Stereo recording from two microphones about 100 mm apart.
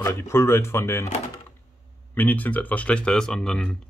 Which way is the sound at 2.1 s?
20° left (ahead or behind).